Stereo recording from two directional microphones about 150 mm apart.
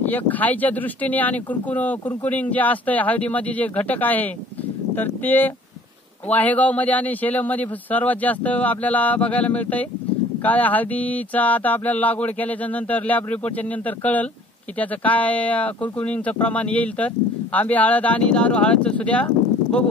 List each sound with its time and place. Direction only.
0.0 s speech: 10° left (ahead or behind)